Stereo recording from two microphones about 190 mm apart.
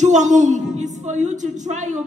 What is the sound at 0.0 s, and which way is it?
A woman's voice, 40° right (ahead or behind).